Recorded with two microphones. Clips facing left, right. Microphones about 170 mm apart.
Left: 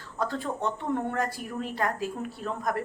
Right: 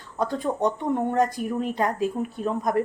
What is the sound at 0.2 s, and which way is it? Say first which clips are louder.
Speech: right 6 dB; 15° right (ahead or behind).